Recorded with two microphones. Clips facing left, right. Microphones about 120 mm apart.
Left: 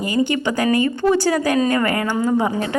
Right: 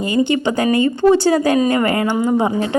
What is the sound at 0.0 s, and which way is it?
A woman's voice, 25° right (ahead or behind).